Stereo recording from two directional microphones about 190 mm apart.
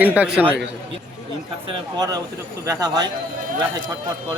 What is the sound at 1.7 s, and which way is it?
Speech, 20° right (ahead or behind).